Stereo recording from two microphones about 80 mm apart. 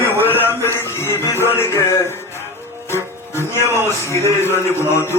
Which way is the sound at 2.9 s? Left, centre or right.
Left.